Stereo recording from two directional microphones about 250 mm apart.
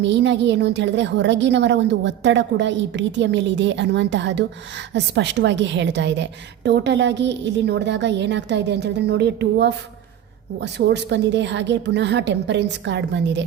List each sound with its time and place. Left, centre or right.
0.0 s a woman's voice: right